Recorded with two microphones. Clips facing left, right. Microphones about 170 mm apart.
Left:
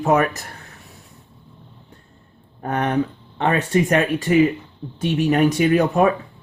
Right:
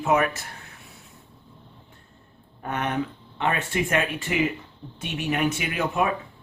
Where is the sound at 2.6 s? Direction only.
40° left (ahead or behind).